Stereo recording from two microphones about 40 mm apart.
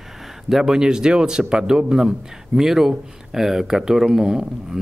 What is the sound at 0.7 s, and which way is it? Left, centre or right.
Speech, centre.